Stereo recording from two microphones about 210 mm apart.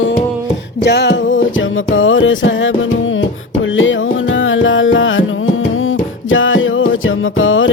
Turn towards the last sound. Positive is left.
turn(degrees=70)  # may be behind; listen again after turning